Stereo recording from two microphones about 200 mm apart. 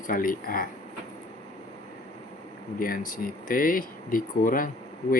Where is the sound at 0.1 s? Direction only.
45° left (ahead or behind).